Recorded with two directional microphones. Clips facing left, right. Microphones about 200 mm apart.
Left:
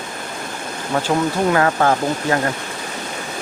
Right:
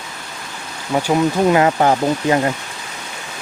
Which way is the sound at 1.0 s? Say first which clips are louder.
Right 4 dB; 15° right (ahead or behind).